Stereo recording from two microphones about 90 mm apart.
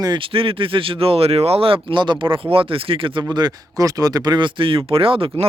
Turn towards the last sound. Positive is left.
turn(degrees=-85)